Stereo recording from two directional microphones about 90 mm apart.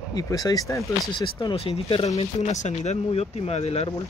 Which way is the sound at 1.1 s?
55° left (ahead or behind).